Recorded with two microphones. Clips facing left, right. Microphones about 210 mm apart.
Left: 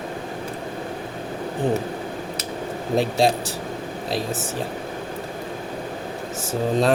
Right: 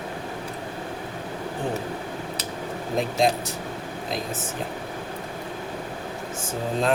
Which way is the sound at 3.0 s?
35° left (ahead or behind).